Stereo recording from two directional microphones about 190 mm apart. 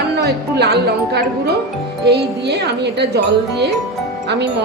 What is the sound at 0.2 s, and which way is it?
Speech, 60° right (ahead or behind).